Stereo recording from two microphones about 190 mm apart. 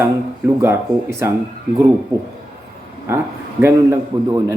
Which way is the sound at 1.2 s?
15° right (ahead or behind).